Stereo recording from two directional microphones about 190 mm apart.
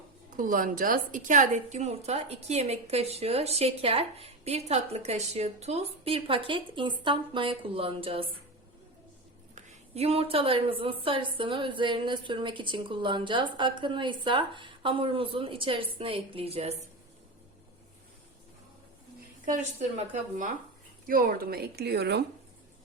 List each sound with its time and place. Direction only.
0.3 s a woman's voice: 45° right (ahead or behind); by 8.2 s 30° right (ahead or behind)
9.6 s a woman's voice: 30° right (ahead or behind)
20.0 s a woman's voice: 40° right (ahead or behind); by 22.2 s 60° right (ahead or behind)